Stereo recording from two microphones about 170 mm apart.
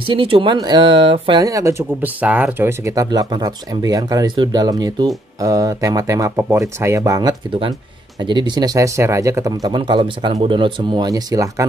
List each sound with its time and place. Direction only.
0.1 s speech: 30° right (ahead or behind)
1.4 s speech: 20° right (ahead or behind)